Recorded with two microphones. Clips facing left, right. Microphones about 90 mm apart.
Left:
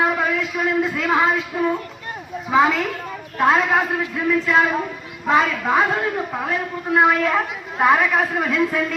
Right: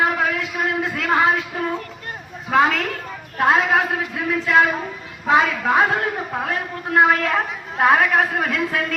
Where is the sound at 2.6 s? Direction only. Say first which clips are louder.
Left 1 dB; centre (ahead or behind).